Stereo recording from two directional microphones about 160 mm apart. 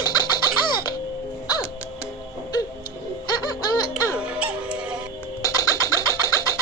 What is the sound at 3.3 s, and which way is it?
Baby laughter, 25° left (ahead or behind).